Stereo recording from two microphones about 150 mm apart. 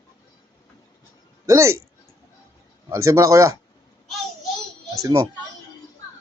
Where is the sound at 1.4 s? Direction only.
20° right (ahead or behind).